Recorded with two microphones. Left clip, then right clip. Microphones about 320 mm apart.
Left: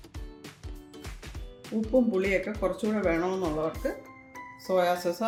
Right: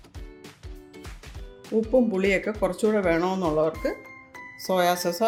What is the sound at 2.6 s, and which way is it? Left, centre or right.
Speech, right.